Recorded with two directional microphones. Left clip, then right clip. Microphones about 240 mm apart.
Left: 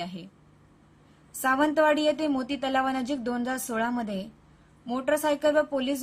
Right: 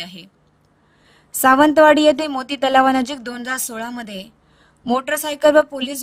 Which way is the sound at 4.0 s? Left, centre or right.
Right.